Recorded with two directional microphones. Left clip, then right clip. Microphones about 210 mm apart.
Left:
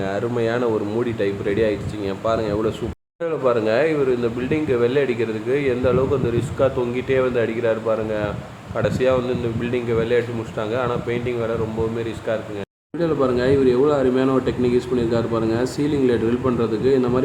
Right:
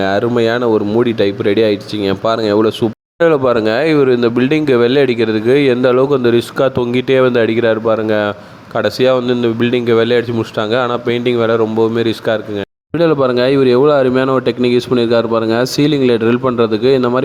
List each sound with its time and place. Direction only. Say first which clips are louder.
0.0 s speech: right 9 dB; 40° right (ahead or behind)